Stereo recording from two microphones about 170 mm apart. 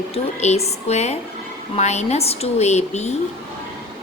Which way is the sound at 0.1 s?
40° left (ahead or behind).